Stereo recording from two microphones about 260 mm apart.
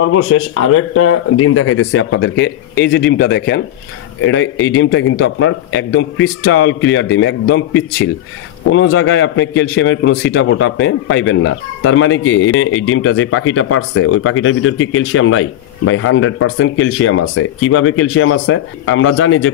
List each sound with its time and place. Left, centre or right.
0.0 s speech: left